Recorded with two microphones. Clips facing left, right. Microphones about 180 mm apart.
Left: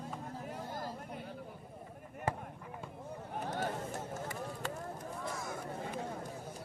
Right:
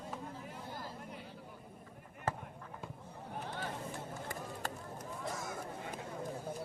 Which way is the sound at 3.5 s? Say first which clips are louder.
Left 6 dB; 45° left (ahead or behind).